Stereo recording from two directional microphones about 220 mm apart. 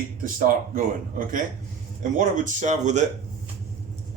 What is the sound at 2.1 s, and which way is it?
Speech, 35° right (ahead or behind).